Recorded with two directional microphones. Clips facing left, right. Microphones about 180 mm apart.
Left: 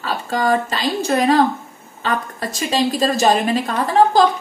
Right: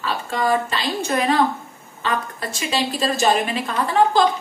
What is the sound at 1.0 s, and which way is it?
Speech, 35° left (ahead or behind).